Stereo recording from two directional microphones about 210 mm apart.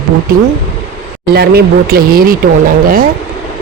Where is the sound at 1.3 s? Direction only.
50° right (ahead or behind).